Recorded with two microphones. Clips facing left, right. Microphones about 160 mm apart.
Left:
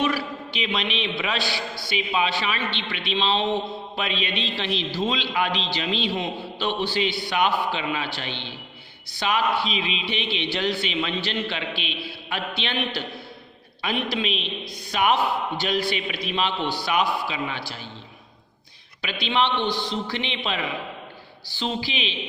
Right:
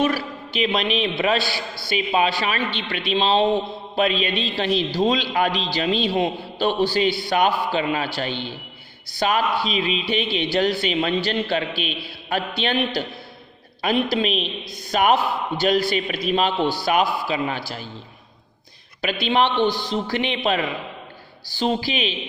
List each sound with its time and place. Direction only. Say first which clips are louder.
0.0 s a man's voice: right 3 dB; 40° right (ahead or behind)
19.0 s a man's voice: right 4 dB; 40° right (ahead or behind)